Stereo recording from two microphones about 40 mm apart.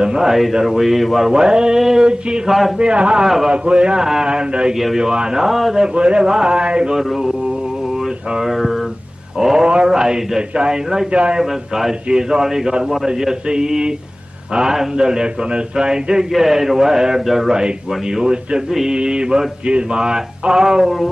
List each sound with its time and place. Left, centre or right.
0.0 s a man's voice: centre
1.3 s mantra: centre
1.8 s a man's voice: centre
2.8 s mantra: right
4.9 s a man's voice: centre
5.8 s mantra: right
6.9 s a sound: centre
8.5 s a man's voice: centre
11.1 s mantra: right
11.3 s a man's voice: centre
17.5 s mantra: centre
18.7 s a man's voice: centre
18.9 s mantra: right